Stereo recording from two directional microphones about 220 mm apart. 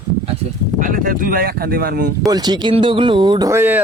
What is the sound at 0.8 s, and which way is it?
Speech, 40° right (ahead or behind).